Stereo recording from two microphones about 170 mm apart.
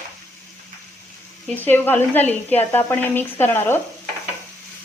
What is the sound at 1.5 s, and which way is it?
A woman's voice, 10° left (ahead or behind).